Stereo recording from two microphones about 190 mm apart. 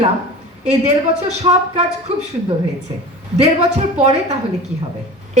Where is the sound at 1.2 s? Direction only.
35° right (ahead or behind).